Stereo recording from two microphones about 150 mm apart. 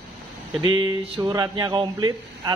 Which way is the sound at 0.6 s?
25° right (ahead or behind).